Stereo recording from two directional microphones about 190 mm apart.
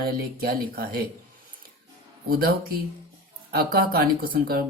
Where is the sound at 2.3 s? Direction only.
50° right (ahead or behind).